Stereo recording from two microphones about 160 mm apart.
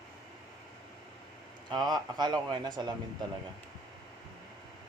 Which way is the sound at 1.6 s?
25° right (ahead or behind).